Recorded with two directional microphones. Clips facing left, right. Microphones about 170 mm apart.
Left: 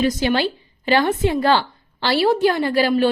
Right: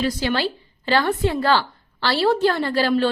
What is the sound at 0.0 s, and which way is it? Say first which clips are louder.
A woman's voice: left 3 dB; 20° left (ahead or behind).